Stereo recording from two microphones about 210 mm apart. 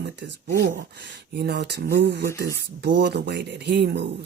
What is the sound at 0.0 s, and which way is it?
Speech, 55° right (ahead or behind).